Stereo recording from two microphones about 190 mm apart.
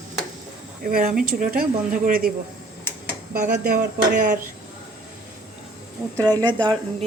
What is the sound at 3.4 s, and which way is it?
Speech, 50° right (ahead or behind).